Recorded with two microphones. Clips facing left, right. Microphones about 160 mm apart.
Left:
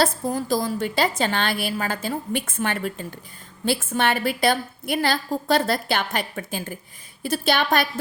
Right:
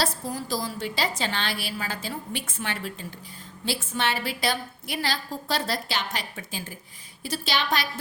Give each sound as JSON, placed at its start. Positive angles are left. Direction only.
{"t": 0.0, "sound": "a woman's voice", "side_deg": 50}